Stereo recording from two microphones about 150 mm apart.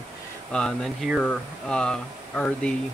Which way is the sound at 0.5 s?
Centre (ahead or behind).